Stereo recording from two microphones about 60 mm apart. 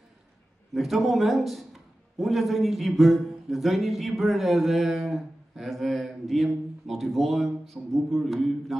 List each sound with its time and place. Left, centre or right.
0.7 s a man's voice: centre